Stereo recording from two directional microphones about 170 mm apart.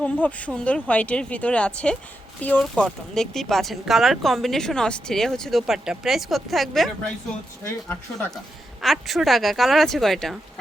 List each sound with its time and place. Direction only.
0.0 s speech: 10° left (ahead or behind)
8.8 s speech: centre (ahead or behind)